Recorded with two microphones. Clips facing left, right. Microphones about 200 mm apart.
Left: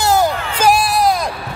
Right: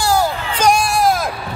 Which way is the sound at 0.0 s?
20° left (ahead or behind).